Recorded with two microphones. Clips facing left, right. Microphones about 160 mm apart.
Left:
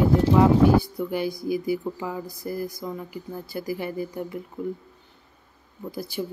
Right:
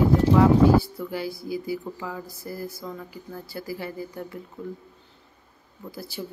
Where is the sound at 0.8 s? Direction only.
20° left (ahead or behind).